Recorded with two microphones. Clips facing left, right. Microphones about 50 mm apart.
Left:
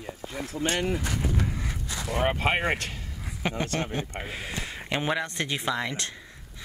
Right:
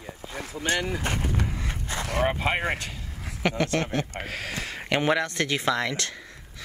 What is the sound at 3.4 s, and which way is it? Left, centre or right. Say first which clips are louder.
Speech: right 4 dB; right.